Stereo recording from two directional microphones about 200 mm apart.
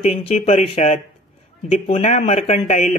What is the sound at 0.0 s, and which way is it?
Speech, 30° left (ahead or behind).